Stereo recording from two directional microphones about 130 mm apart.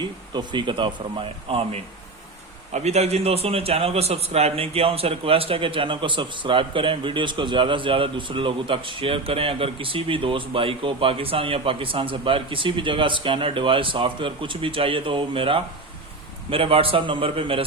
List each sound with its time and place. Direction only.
0.0 s a man's voice: 35° right (ahead or behind)